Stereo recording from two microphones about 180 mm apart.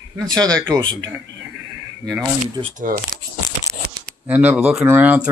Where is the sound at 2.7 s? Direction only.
50° right (ahead or behind).